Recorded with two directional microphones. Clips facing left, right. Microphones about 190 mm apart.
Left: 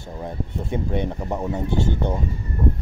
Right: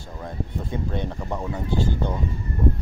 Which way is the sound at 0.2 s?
20° left (ahead or behind).